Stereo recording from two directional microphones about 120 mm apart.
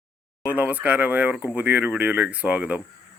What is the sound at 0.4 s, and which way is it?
Speech, 15° right (ahead or behind).